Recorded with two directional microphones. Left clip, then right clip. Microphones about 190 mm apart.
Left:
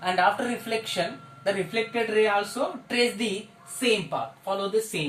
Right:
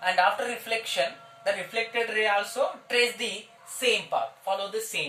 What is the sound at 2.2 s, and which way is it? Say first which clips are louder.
Music: left 2 dB; 20° right (ahead or behind).